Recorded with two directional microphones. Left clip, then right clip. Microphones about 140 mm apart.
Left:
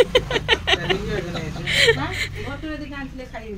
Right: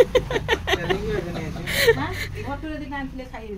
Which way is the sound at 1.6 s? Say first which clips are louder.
Left 2 dB; 30° right (ahead or behind).